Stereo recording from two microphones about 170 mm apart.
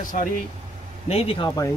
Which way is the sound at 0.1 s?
50° left (ahead or behind).